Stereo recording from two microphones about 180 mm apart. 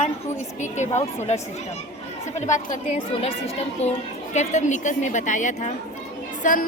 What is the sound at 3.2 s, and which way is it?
A woman's voice, 35° left (ahead or behind).